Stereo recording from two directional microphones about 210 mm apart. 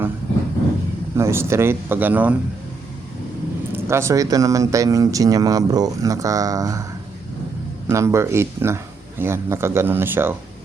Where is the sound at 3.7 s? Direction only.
10° right (ahead or behind).